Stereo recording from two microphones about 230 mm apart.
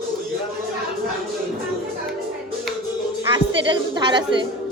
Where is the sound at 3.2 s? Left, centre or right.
Right.